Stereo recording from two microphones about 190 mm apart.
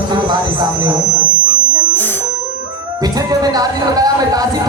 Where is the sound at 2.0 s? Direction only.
10° left (ahead or behind).